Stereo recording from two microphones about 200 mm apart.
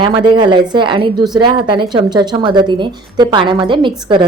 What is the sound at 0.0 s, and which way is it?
A woman's voice, 25° right (ahead or behind).